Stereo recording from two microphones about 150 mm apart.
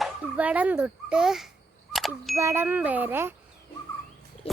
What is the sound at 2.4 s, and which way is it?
Wind chime, 20° right (ahead or behind).